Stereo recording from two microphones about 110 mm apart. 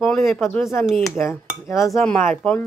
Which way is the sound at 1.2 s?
25° left (ahead or behind).